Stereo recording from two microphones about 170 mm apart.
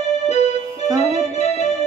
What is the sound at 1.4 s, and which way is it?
Keyboard, 40° left (ahead or behind).